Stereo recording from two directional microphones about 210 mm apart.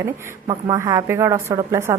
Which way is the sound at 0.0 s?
15° right (ahead or behind).